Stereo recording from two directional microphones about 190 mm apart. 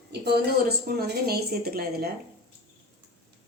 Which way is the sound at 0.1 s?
55° right (ahead or behind).